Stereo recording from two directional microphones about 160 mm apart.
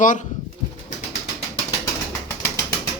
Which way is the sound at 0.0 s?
55° left (ahead or behind).